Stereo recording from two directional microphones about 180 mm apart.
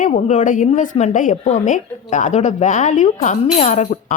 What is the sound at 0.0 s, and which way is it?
A woman's voice, 40° left (ahead or behind).